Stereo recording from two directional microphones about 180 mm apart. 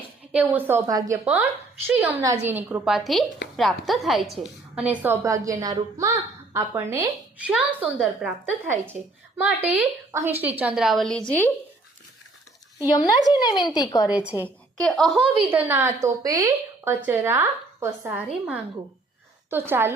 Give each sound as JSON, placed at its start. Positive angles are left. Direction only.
{"t": 0.3, "sound": "a woman's voice", "side_deg": -10}
{"t": 13.0, "sound": "speech", "side_deg": 20}
{"t": 14.1, "sound": "a woman's voice", "side_deg": -5}
{"t": 14.4, "sound": "a woman's voice", "side_deg": 5}
{"t": 15.4, "sound": "a woman's voice", "side_deg": -10}